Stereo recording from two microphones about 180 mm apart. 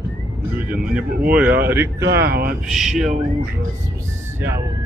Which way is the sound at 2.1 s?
65° right (ahead or behind).